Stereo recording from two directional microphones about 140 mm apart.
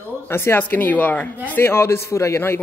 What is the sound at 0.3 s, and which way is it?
A man's voice, 15° left (ahead or behind).